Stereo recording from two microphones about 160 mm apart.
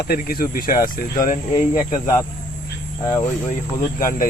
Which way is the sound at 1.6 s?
45° left (ahead or behind).